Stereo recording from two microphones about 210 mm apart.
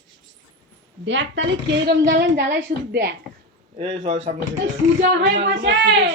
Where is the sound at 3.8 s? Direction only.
30° right (ahead or behind); by 6.0 s 55° right (ahead or behind).